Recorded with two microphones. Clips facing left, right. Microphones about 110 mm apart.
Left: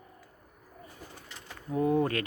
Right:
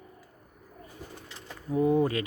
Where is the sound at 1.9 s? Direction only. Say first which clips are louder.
Right 1 dB; centre (ahead or behind).